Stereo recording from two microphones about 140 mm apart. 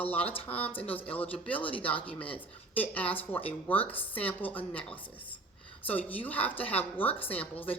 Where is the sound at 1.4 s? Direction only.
10° left (ahead or behind).